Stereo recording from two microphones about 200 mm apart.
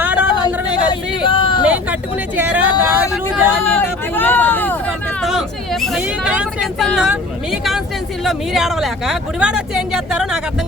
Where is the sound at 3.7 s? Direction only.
10° left (ahead or behind).